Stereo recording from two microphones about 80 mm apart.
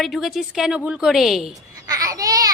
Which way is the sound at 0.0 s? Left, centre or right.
Centre.